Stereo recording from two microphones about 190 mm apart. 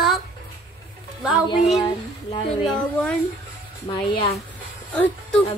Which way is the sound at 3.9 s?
30° left (ahead or behind).